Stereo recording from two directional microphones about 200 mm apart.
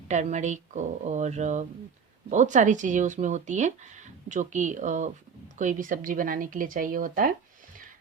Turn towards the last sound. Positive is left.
turn(degrees=-45)  # may be behind; listen again after turning